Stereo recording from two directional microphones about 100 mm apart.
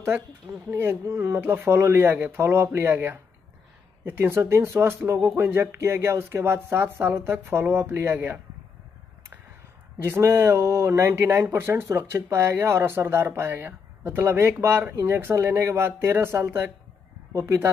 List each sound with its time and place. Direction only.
0.7 s speech: 20° right (ahead or behind)
10.0 s speech: 25° right (ahead or behind)